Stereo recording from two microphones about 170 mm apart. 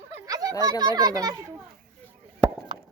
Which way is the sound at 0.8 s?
25° right (ahead or behind).